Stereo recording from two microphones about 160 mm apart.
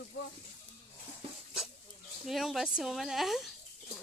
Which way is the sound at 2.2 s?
Centre (ahead or behind).